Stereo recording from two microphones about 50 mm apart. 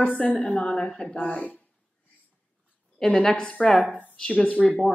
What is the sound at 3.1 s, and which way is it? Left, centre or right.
Speech, centre.